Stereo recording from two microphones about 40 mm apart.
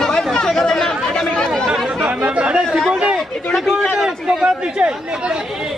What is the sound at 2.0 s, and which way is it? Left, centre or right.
Chatter, right.